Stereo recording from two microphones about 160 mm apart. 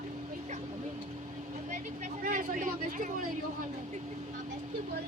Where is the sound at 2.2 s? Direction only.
55° right (ahead or behind).